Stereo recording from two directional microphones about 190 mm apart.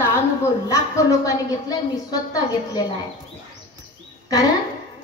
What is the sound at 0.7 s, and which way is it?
A woman's voice, 15° left (ahead or behind).